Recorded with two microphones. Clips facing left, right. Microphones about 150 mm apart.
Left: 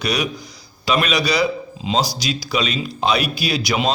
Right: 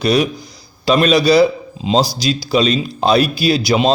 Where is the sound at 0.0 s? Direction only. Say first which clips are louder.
Right 7 dB; 30° right (ahead or behind).